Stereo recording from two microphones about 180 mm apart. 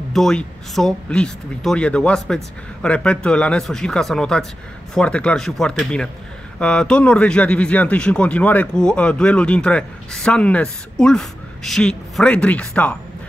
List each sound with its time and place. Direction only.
0.1 s speech: 5° left (ahead or behind)